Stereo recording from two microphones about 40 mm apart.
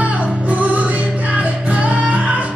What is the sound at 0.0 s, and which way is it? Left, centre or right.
Music, right.